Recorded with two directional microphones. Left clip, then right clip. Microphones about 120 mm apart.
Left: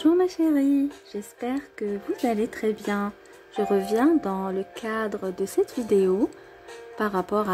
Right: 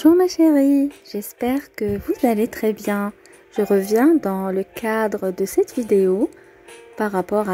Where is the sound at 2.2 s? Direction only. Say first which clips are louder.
Right 6 dB; 50° right (ahead or behind).